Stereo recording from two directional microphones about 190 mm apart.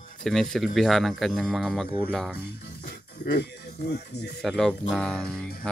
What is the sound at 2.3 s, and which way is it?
Speech, 60° left (ahead or behind).